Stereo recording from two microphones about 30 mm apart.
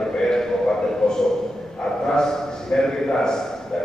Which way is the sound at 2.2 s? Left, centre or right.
Centre.